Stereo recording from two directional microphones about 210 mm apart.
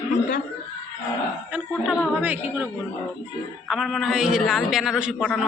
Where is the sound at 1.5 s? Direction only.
5° right (ahead or behind).